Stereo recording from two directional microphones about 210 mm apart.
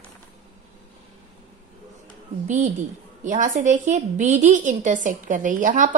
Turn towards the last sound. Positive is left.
turn(degrees=-40)  # may be behind; listen again after turning